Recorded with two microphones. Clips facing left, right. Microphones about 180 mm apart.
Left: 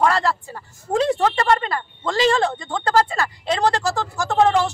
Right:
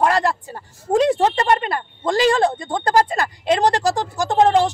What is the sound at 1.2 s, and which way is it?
Speech, 20° right (ahead or behind).